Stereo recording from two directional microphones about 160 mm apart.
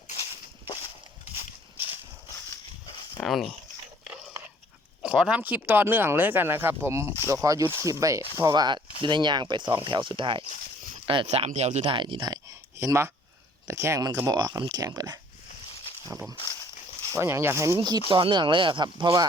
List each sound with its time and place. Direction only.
3.2 s speech: centre (ahead or behind)
5.0 s speech: 5° right (ahead or behind); by 15.2 s 25° right (ahead or behind)
16.3 s a sound: 20° left (ahead or behind)
17.2 s speech: 15° right (ahead or behind)